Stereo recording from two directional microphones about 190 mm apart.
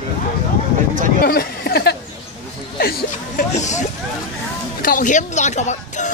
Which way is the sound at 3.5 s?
40° left (ahead or behind).